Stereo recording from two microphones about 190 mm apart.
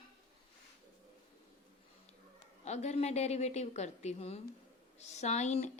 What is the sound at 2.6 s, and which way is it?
Speech, 35° left (ahead or behind).